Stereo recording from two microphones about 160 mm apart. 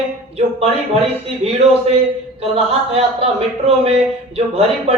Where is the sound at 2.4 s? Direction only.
40° right (ahead or behind).